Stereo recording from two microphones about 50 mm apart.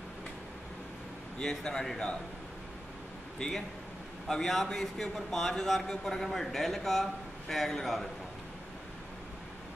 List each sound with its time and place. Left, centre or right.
1.4 s a man's voice: centre
3.3 s a man's voice: centre